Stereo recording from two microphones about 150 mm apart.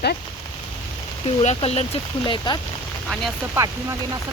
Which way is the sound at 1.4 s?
45° left (ahead or behind).